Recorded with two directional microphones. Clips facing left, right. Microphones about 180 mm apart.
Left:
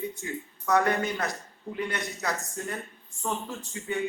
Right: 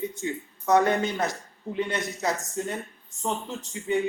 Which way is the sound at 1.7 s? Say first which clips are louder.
Right 5 dB; centre (ahead or behind).